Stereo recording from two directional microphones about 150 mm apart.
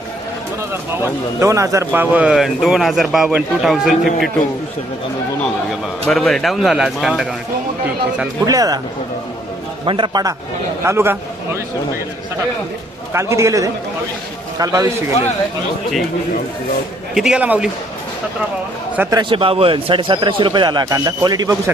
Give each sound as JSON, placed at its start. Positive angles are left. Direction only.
{"t": 0.7, "sound": "speech", "side_deg": -15}
{"t": 6.1, "sound": "speech", "side_deg": 5}
{"t": 8.4, "sound": "a man's voice", "side_deg": -25}
{"t": 9.8, "sound": "a man's voice", "side_deg": -35}
{"t": 10.8, "sound": "a man's voice", "side_deg": -15}
{"t": 13.1, "sound": "a man's voice", "side_deg": -20}
{"t": 17.2, "sound": "speech", "side_deg": -5}
{"t": 19.1, "sound": "a man's voice", "side_deg": -35}